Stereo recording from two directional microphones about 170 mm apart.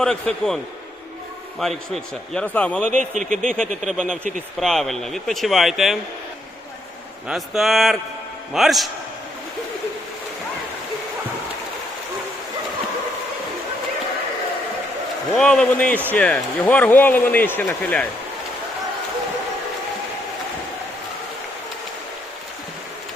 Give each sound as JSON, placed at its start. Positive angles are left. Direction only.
{"t": 0.0, "sound": "speech", "side_deg": 5}
{"t": 1.6, "sound": "speech", "side_deg": 5}
{"t": 3.0, "sound": "a man's voice", "side_deg": -45}
{"t": 3.4, "sound": "speech", "side_deg": 5}
{"t": 3.8, "sound": "speech", "side_deg": -5}
{"t": 7.3, "sound": "speech", "side_deg": 0}
{"t": 15.4, "sound": "speech", "side_deg": 5}